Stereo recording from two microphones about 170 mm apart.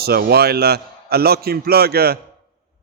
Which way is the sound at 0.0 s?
70° right (ahead or behind).